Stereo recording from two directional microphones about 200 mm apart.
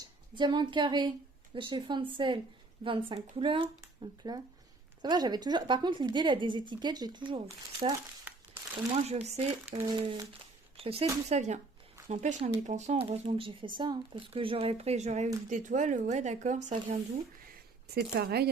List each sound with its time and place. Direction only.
0.3 s speech: 20° right (ahead or behind)
9.0 s speech: 30° right (ahead or behind)
9.7 s speech: 20° right (ahead or behind)
10.8 s a sound: 30° right (ahead or behind)
11.3 s speech: 35° right (ahead or behind)
17.8 s speech: 50° right (ahead or behind)